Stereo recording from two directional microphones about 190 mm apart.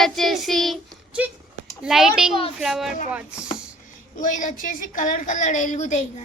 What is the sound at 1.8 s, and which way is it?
Speech, centre (ahead or behind).